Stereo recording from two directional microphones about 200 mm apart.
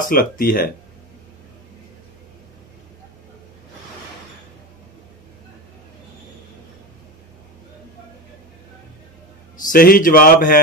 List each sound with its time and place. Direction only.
0.1 s speech: 45° left (ahead or behind)
9.7 s speech: 45° left (ahead or behind)